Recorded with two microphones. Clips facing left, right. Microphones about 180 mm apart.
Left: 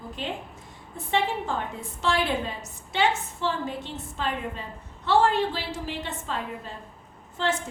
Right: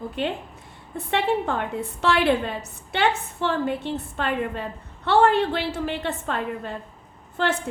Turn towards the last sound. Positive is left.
turn(degrees=-65)  # may be behind; listen again after turning